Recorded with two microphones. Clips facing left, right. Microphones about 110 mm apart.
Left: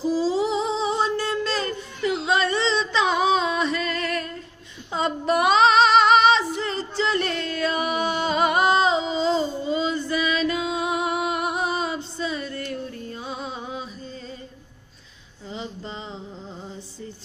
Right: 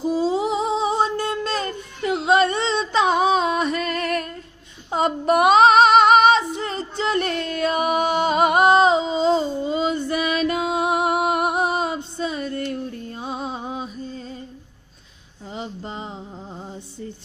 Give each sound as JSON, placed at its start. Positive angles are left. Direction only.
{"t": 0.0, "sound": "a sound", "side_deg": -50}
{"t": 4.9, "sound": "female singing", "side_deg": -45}
{"t": 7.0, "sound": "music", "side_deg": -40}
{"t": 15.4, "sound": "music", "side_deg": -45}